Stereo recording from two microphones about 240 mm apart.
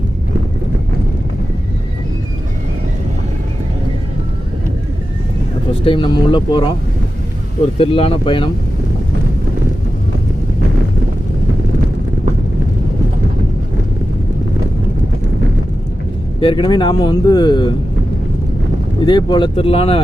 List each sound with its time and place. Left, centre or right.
5.8 s a man's voice: left
7.8 s a man's voice: left
16.4 s a man's voice: centre
19.0 s a man's voice: centre